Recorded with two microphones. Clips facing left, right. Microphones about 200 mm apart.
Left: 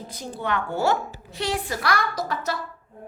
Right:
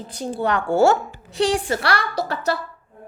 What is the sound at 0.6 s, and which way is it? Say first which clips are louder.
A woman's voice: right 7 dB; 90° right.